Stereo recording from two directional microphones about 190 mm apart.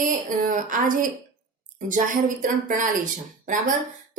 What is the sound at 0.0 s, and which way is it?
Speech, 45° right (ahead or behind).